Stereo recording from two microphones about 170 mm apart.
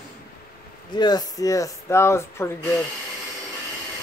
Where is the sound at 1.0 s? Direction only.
20° left (ahead or behind).